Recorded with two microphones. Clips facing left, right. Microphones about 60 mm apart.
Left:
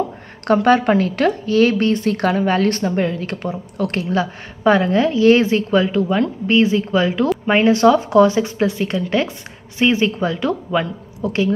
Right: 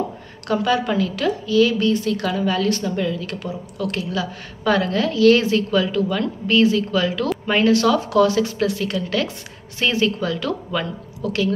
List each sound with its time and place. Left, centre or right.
0.5 s a woman's voice: left